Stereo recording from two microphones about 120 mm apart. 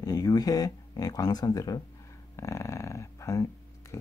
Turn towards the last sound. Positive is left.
turn(degrees=25)  # may be behind; listen again after turning